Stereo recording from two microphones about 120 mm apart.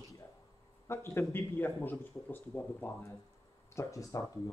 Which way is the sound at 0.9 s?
20° left (ahead or behind).